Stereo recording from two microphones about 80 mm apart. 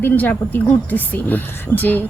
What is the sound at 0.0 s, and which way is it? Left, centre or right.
Speech, left.